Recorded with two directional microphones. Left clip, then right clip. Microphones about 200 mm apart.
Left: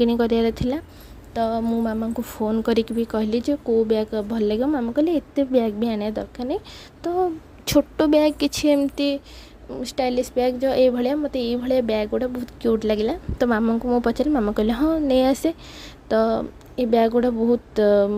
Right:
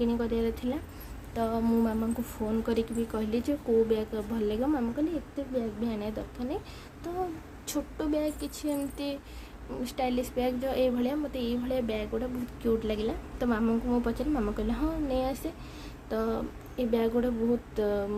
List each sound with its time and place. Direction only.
0.0 s a woman's voice: 40° left (ahead or behind)
1.3 s a sound: 30° left (ahead or behind)
2.5 s a woman's voice: 40° left (ahead or behind)